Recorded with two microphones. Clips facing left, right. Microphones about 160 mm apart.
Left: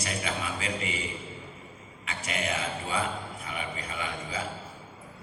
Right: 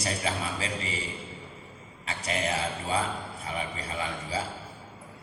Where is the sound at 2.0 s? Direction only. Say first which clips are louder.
Right 2 dB; 35° right (ahead or behind).